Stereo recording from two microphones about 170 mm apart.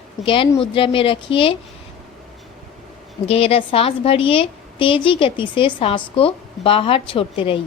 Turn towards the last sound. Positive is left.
turn(degrees=30)  # may be behind; listen again after turning